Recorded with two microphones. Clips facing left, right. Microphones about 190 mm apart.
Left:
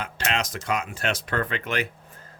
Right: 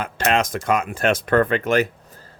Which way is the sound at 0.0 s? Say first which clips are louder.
Right 8 dB; 50° right (ahead or behind).